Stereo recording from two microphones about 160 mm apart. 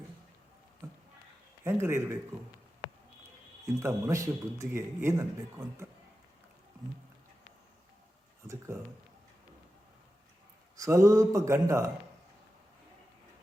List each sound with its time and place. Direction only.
1.6 s speech: 15° right (ahead or behind)
3.8 s speech: 20° right (ahead or behind)
8.4 s speech: 15° right (ahead or behind)
10.8 s speech: 20° right (ahead or behind)